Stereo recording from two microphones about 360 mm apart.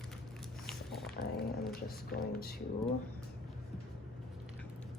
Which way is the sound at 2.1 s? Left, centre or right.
Left.